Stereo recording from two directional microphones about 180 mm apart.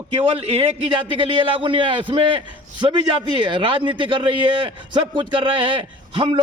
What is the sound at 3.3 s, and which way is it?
A man's voice, 25° right (ahead or behind).